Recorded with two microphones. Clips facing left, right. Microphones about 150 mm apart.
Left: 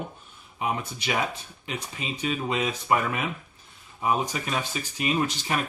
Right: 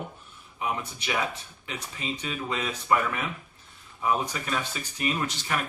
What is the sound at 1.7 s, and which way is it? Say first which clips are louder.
Speech: left 1 dB; 20° left (ahead or behind).